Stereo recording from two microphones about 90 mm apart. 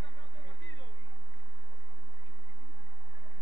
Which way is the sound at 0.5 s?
60° left (ahead or behind).